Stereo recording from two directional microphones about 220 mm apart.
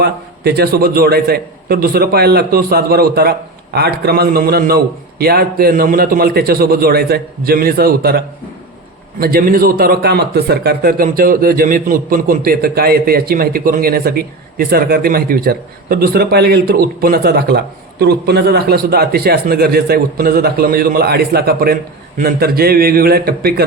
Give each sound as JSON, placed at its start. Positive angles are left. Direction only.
{"t": 0.0, "sound": "a man's voice", "side_deg": -45}